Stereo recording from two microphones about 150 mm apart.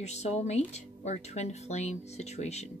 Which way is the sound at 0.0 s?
45° left (ahead or behind).